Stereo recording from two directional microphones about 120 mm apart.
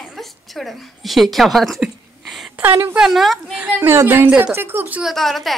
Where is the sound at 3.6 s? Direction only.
15° right (ahead or behind).